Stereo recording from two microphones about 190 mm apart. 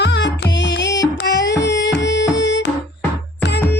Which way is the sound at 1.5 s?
15° left (ahead or behind).